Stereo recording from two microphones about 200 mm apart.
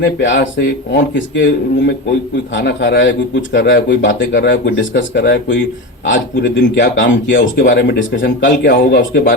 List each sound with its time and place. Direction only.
0.0 s speech: 65° left (ahead or behind)